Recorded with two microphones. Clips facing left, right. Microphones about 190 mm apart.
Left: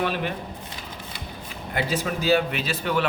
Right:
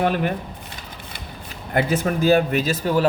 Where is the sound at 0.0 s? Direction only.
50° right (ahead or behind).